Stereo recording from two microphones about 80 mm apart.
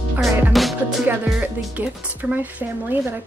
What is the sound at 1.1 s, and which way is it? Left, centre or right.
A woman's voice, right.